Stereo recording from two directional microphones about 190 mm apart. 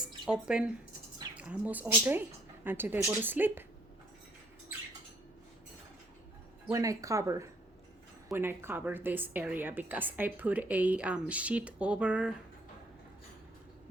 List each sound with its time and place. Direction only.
0.0 s a sound: 5° right (ahead or behind)
1.4 s a woman's voice: 5° right (ahead or behind)
6.7 s a woman's voice: 15° right (ahead or behind)